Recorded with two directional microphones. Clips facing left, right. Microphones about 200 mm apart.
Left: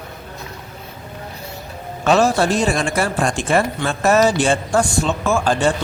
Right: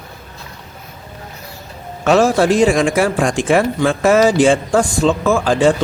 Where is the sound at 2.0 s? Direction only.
85° right.